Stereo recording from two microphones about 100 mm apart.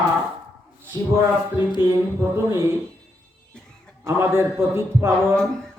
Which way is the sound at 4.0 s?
25° right (ahead or behind).